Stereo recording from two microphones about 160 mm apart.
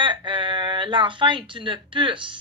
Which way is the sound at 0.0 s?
30° right (ahead or behind).